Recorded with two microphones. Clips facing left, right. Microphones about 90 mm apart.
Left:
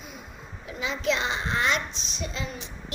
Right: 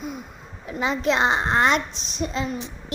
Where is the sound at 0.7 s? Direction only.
45° right (ahead or behind).